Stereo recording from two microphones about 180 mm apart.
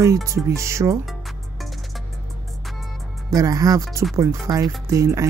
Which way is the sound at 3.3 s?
20° right (ahead or behind).